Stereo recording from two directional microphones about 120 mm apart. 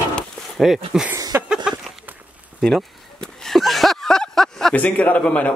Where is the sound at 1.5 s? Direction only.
5° right (ahead or behind).